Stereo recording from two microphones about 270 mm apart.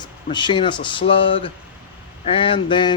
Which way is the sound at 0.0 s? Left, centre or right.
Centre.